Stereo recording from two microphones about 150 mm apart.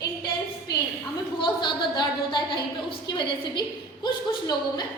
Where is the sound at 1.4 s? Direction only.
30° left (ahead or behind).